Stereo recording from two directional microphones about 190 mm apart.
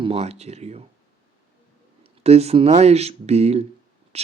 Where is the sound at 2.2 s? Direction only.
35° right (ahead or behind).